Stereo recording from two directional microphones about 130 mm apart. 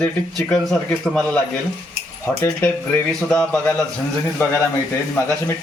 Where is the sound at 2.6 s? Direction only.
10° left (ahead or behind).